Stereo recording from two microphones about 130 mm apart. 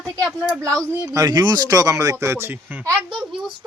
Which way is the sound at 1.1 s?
30° right (ahead or behind).